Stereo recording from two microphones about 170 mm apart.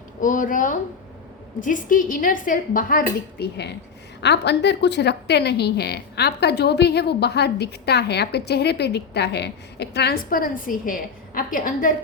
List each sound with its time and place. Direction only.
0.2 s a woman's voice: 50° left (ahead or behind); by 3.7 s 75° left (ahead or behind)
4.2 s a woman's voice: 90° left; by 11.9 s 50° left (ahead or behind)